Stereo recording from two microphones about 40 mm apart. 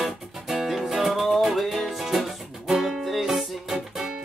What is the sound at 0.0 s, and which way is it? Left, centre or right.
Music, centre.